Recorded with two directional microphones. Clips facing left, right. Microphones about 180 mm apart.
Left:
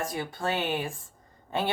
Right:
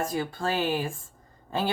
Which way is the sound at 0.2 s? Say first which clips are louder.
Right 1 dB; 20° left (ahead or behind).